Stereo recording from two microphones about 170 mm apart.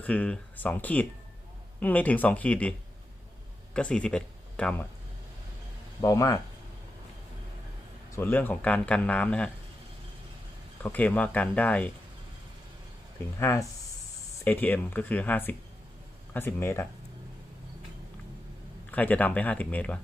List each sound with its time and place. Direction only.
0.0 s speech: 5° left (ahead or behind)
3.8 s speech: 5° left (ahead or behind)
6.0 s speech: 20° left (ahead or behind)
8.1 s speech: 10° left (ahead or behind)
10.8 s speech: 10° left (ahead or behind)
13.4 s speech: 15° left (ahead or behind)
18.9 s speech: 10° left (ahead or behind)